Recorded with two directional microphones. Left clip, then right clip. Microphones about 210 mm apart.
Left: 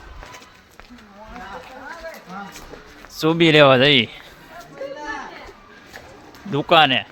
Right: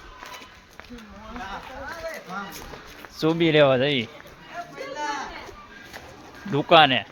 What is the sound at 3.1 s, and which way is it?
Speech, 15° left (ahead or behind).